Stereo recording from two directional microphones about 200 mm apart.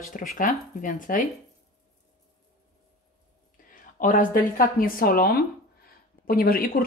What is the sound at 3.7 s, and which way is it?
Speech, 40° left (ahead or behind).